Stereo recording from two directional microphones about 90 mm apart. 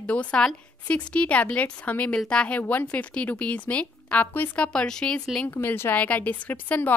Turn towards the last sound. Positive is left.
turn(degrees=20)  # may be behind; listen again after turning